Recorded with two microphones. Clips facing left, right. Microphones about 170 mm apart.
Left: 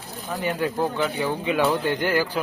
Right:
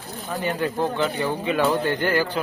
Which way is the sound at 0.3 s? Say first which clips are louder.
Even; 5° left (ahead or behind).